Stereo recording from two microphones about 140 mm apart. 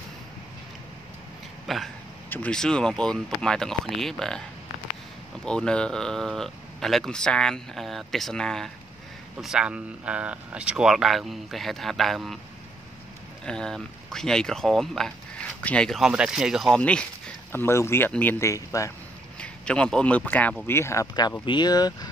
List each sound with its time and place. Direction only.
1.7 s speech: centre (ahead or behind)
2.2 s speech: 10° left (ahead or behind)
5.4 s speech: 5° left (ahead or behind)
13.5 s speech: 5° left (ahead or behind); by 18.9 s 20° left (ahead or behind)
19.4 s speech: 5° left (ahead or behind); by 21.9 s 30° left (ahead or behind)